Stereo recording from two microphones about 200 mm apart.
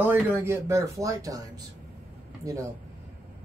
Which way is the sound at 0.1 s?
10° right (ahead or behind).